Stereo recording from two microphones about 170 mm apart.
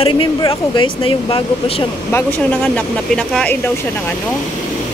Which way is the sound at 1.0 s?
30° left (ahead or behind).